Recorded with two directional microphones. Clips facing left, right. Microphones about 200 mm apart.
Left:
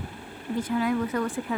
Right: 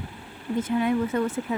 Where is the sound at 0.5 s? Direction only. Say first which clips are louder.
Right 2 dB; 25° right (ahead or behind).